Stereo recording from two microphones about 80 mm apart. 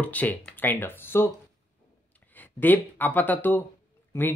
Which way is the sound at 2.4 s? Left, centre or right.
Left.